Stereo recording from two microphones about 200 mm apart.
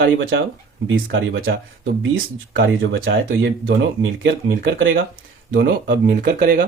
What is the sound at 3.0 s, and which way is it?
Speech, 70° right (ahead or behind).